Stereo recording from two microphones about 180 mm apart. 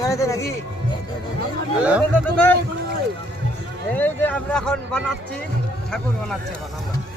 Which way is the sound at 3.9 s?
10° left (ahead or behind).